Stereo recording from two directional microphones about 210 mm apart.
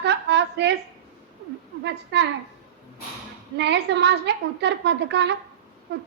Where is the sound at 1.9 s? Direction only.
55° right (ahead or behind).